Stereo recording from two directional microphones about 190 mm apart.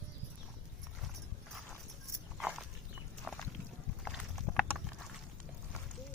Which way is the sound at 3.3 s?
Centre (ahead or behind).